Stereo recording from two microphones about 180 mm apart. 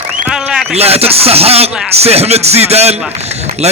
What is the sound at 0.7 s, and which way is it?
A man's voice, 35° right (ahead or behind).